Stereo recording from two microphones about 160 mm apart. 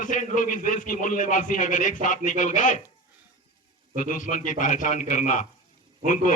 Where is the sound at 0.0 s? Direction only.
55° left (ahead or behind).